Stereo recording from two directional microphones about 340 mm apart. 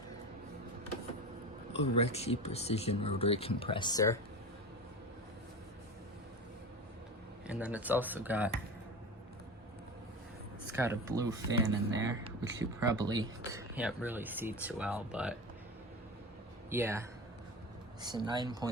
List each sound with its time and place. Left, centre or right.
1.8 s speech: centre
7.4 s speech: centre
10.8 s speech: centre
16.6 s speech: centre